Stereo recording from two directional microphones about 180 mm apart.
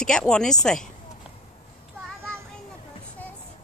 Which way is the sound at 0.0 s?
5° left (ahead or behind).